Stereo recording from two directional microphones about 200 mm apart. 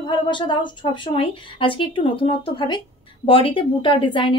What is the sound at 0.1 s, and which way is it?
A woman's voice, 25° left (ahead or behind).